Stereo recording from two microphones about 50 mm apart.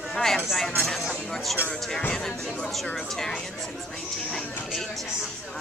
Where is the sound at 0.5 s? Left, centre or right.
Centre.